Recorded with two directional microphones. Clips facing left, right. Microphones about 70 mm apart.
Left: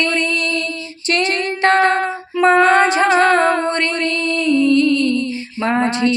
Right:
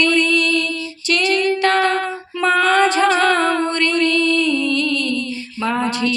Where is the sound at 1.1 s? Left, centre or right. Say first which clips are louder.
Right 1 dB; left.